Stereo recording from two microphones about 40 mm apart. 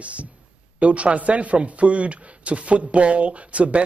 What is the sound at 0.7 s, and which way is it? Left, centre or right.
Speech, right.